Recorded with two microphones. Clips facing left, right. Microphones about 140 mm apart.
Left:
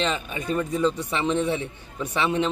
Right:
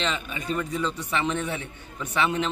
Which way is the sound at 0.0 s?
35° left (ahead or behind).